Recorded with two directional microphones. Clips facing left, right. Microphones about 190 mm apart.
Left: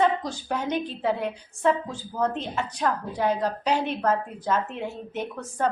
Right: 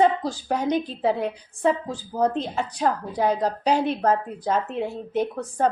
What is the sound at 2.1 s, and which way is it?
A woman's voice, 35° right (ahead or behind).